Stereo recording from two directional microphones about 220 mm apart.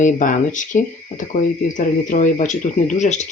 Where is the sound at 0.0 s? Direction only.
35° left (ahead or behind).